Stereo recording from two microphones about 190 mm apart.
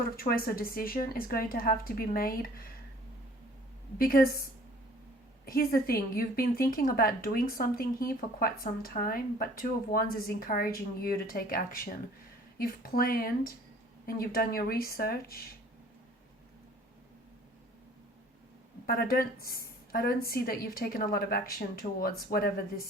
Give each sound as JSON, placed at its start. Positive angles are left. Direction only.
{"t": 0.2, "sound": "a woman's voice", "side_deg": 50}
{"t": 3.9, "sound": "a woman's voice", "side_deg": 50}
{"t": 5.5, "sound": "a woman's voice", "side_deg": 50}
{"t": 18.9, "sound": "a woman's voice", "side_deg": 55}